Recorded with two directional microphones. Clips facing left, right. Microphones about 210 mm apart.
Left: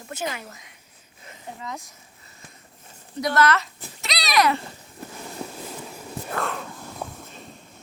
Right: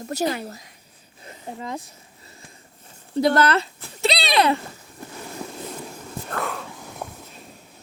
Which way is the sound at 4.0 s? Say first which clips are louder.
Right 3 dB; 30° right (ahead or behind).